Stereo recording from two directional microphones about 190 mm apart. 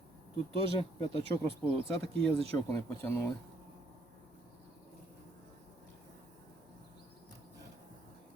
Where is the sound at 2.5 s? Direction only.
15° left (ahead or behind).